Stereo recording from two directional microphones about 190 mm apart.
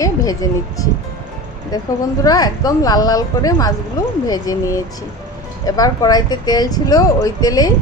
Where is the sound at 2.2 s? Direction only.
20° left (ahead or behind).